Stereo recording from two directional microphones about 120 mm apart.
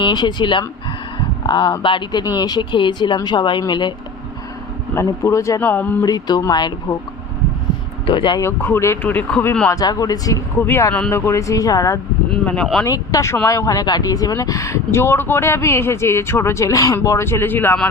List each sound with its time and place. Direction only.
0.0 s speech: 40° left (ahead or behind)
4.9 s speech: 25° left (ahead or behind)
6.0 s speech: 30° left (ahead or behind)
8.0 s speech: 45° left (ahead or behind)
8.4 s speech: 20° left (ahead or behind)
9.6 s speech: 30° left (ahead or behind)